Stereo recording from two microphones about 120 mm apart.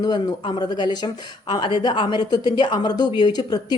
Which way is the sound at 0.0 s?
35° left (ahead or behind).